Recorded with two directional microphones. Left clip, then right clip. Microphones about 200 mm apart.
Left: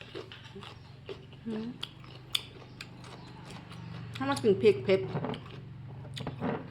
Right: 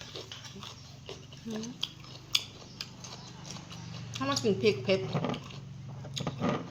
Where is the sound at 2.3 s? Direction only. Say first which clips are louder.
Right 3 dB; 20° left (ahead or behind).